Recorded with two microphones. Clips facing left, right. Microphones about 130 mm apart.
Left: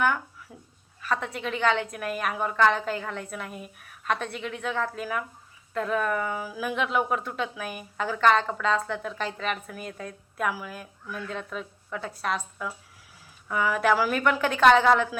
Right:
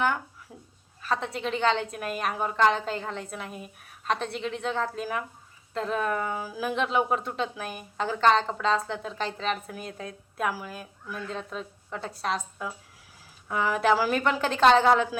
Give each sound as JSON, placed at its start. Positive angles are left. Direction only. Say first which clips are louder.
{"t": 1.0, "sound": "a woman's voice", "louder": "even", "side_deg": -30}
{"t": 11.1, "sound": "a woman's voice", "louder": "left 1 dB", "side_deg": -30}